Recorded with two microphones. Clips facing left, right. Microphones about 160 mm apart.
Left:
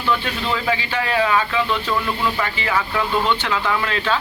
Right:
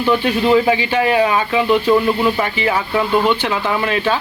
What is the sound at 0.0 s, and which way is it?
Speech, 15° right (ahead or behind).